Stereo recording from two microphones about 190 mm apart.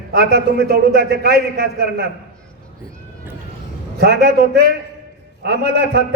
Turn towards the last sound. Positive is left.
turn(degrees=-60)  # may be behind; listen again after turning